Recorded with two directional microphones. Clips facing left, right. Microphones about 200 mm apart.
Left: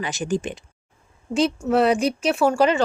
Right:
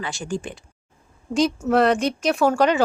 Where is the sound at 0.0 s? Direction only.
20° left (ahead or behind).